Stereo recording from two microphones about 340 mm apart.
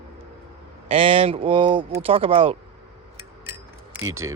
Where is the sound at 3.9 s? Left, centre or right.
Right.